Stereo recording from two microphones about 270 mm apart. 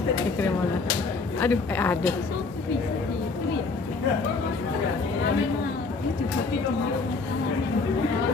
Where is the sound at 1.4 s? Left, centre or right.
Centre.